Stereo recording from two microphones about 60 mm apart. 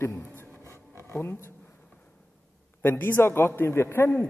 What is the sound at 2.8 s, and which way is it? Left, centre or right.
A man's voice, left.